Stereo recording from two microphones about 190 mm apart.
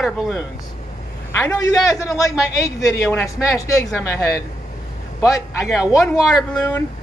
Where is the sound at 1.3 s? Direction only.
15° left (ahead or behind).